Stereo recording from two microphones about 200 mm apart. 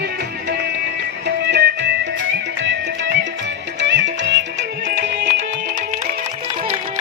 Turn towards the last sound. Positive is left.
turn(degrees=-60)  # may be behind; listen again after turning